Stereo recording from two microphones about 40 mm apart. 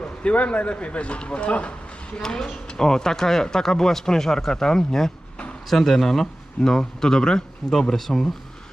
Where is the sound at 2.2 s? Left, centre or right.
Centre.